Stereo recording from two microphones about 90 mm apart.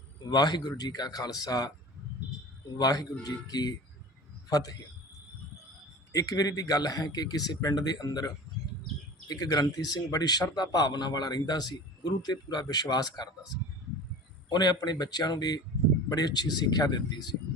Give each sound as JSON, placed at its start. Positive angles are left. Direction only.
{"t": 0.3, "sound": "a man's voice", "side_deg": 50}
{"t": 2.7, "sound": "a man's voice", "side_deg": 45}
{"t": 6.1, "sound": "a man's voice", "side_deg": 45}
{"t": 9.3, "sound": "a man's voice", "side_deg": 45}
{"t": 14.5, "sound": "a man's voice", "side_deg": 50}